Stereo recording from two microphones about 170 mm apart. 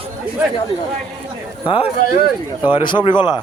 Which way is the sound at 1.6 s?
30° left (ahead or behind).